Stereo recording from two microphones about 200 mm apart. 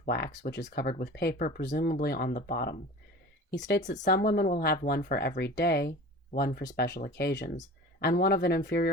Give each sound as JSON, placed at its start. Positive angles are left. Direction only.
{"t": 0.0, "sound": "speech", "side_deg": 50}
{"t": 3.5, "sound": "speech", "side_deg": 60}